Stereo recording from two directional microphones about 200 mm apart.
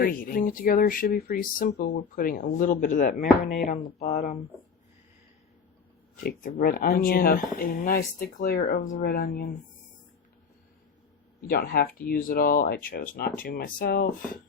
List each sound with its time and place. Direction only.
0.0 s speech: 45° left (ahead or behind)
6.2 s speech: 45° left (ahead or behind)
11.4 s speech: 50° left (ahead or behind)